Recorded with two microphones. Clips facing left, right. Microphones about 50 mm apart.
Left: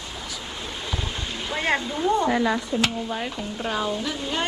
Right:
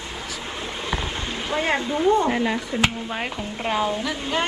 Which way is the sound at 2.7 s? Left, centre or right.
Right.